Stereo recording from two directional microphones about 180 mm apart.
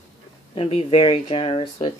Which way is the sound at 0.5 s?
30° left (ahead or behind).